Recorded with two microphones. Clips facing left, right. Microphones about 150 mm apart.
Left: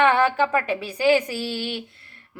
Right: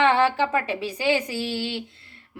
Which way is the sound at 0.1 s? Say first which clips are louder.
Left 1 dB; 25° right (ahead or behind).